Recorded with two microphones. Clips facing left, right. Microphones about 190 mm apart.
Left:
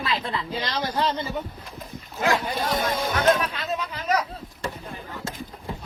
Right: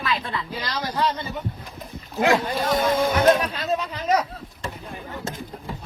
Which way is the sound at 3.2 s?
35° right (ahead or behind).